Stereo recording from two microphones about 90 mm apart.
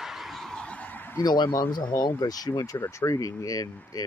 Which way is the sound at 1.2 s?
50° left (ahead or behind).